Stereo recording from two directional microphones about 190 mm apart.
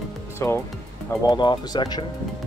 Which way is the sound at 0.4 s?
15° left (ahead or behind).